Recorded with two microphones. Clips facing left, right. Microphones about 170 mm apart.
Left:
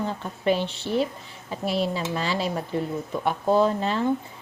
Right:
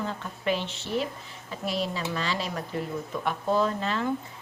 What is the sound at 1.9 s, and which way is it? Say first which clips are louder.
A woman's voice: left 3 dB; 30° left (ahead or behind).